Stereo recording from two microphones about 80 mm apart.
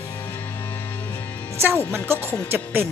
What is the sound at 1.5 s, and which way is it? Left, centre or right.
Music, right.